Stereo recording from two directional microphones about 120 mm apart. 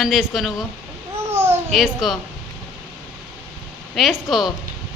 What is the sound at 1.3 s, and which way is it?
Babbling, 20° right (ahead or behind).